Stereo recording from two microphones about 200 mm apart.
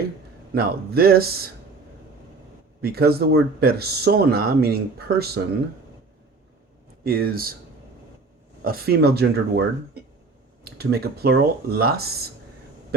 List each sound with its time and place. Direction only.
0.5 s speech: 50° right (ahead or behind)
2.8 s speech: 50° right (ahead or behind)
7.0 s speech: 50° right (ahead or behind)
8.6 s speech: 50° right (ahead or behind)